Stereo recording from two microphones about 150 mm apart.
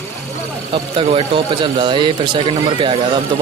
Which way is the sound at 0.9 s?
35° right (ahead or behind).